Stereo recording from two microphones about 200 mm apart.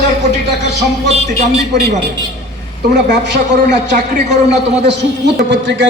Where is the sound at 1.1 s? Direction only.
30° right (ahead or behind).